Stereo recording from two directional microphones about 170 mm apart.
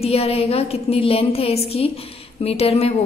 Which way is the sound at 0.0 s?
35° left (ahead or behind).